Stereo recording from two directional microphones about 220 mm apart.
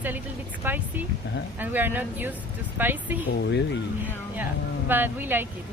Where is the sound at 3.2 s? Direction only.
50° left (ahead or behind).